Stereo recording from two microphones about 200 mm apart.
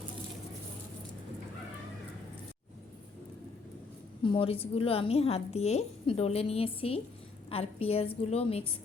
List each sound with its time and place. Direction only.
4.2 s a woman's voice: 25° left (ahead or behind)